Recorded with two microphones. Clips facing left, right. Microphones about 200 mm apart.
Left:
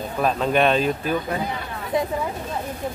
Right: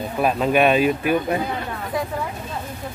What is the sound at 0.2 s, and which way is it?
Speech, 10° right (ahead or behind).